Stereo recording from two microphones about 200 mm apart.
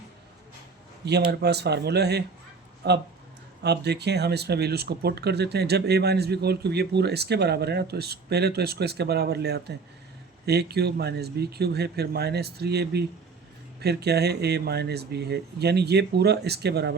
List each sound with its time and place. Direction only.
1.0 s speech: 55° right (ahead or behind)